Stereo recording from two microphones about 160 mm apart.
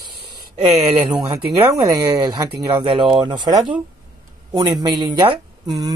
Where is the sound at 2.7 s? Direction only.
30° right (ahead or behind).